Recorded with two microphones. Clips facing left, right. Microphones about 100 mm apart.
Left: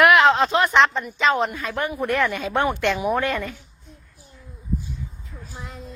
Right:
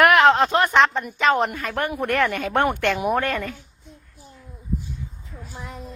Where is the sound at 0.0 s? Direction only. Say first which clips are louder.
Even; 45° right (ahead or behind).